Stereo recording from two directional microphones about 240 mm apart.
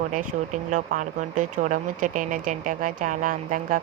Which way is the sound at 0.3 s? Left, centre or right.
Right.